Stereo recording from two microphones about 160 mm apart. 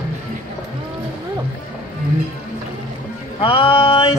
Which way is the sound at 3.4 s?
35° left (ahead or behind).